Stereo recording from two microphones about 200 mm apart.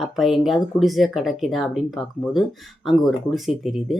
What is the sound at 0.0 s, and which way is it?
Speech, centre (ahead or behind).